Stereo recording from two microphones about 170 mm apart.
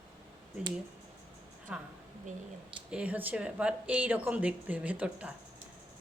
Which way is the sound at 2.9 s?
10° right (ahead or behind).